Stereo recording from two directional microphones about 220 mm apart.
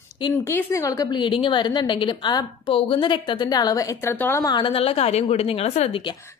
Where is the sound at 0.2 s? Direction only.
10° left (ahead or behind).